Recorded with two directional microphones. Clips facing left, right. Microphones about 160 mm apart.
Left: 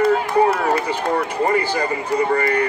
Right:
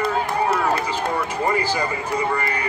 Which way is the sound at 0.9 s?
60° left (ahead or behind).